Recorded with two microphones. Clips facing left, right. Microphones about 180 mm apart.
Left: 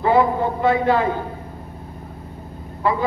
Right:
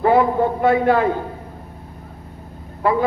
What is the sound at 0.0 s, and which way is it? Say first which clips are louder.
Speech: right 2 dB; 55° right (ahead or behind).